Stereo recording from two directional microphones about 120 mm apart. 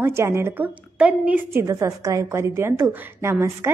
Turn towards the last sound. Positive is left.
turn(degrees=-25)  # may be behind; listen again after turning